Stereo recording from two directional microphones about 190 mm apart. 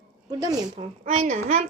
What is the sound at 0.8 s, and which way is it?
Speech, 35° right (ahead or behind).